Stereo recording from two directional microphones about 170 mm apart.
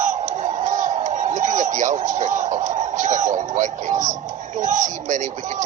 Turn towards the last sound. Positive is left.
turn(degrees=-45)  # may be behind; listen again after turning